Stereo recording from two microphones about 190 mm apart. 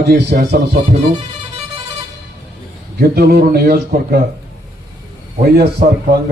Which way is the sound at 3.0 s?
55° right (ahead or behind).